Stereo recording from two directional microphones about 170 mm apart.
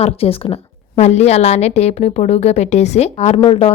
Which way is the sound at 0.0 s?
35° left (ahead or behind).